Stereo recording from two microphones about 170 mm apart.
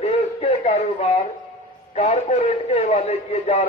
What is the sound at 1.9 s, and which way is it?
A man's voice, 40° left (ahead or behind).